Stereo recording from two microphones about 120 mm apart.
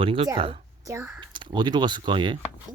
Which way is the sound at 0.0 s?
50° right (ahead or behind).